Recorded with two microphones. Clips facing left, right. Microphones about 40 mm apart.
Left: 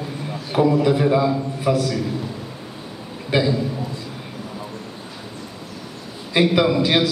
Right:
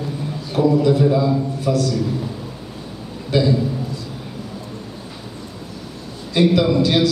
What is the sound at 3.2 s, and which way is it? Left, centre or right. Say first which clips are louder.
Speech: right 2 dB; left.